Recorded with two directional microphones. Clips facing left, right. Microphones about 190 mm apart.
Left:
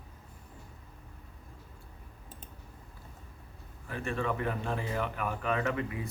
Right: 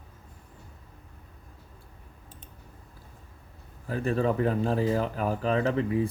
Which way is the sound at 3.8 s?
35° right (ahead or behind).